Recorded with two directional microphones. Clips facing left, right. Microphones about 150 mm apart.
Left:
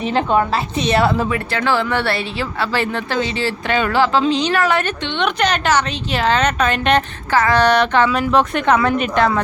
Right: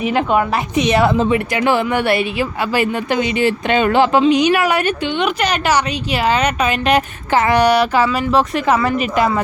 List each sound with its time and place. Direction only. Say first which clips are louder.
0.0 s a woman's voice: right 1 dB; 10° right (ahead or behind)
7.3 s a woman's voice: right 1 dB; 20° right (ahead or behind)